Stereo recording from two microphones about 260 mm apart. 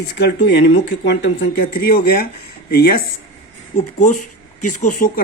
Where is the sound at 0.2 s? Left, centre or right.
Left.